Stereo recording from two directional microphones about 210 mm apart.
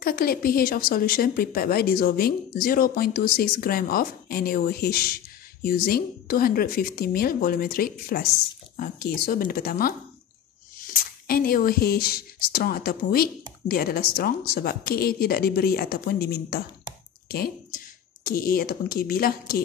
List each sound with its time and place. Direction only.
0.0 s speech: 45° left (ahead or behind)
18.2 s speech: 45° left (ahead or behind)